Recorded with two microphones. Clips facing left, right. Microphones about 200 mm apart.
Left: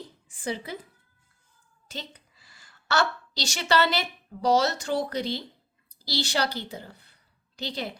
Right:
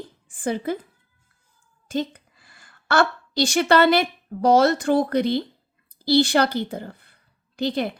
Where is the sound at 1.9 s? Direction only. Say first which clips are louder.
Right 14 dB; 50° right (ahead or behind).